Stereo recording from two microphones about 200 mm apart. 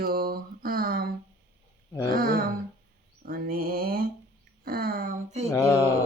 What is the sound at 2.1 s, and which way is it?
Speech, 45° right (ahead or behind).